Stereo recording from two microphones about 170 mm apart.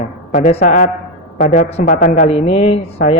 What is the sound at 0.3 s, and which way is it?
A man's voice, 45° left (ahead or behind).